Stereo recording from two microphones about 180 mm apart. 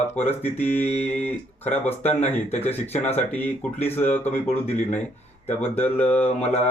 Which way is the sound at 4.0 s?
35° left (ahead or behind).